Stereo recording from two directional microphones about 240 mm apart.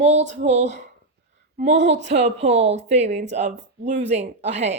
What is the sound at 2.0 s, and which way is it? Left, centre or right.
Speech, right.